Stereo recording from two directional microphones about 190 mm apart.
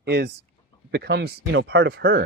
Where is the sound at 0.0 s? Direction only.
60° right (ahead or behind).